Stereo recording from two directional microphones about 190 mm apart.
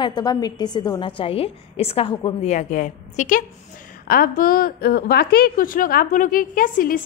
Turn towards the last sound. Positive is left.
turn(degrees=45)  # may be behind; listen again after turning